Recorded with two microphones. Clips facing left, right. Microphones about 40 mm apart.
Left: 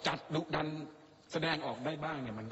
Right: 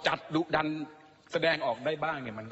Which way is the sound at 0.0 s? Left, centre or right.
Right.